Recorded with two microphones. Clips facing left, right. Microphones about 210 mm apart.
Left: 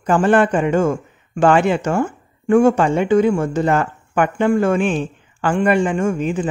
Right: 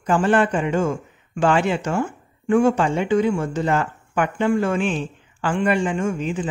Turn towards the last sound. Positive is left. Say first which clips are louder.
# left 4 dB
turn(degrees=50)  # may be behind; listen again after turning